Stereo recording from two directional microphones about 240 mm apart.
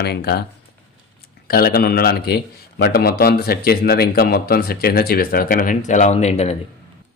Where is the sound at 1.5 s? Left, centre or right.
Left.